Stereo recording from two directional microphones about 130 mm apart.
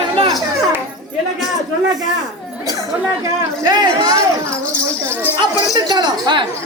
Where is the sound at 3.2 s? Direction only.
30° right (ahead or behind).